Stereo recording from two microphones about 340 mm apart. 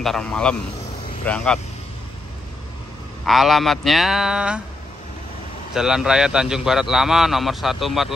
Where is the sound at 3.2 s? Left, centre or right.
Centre.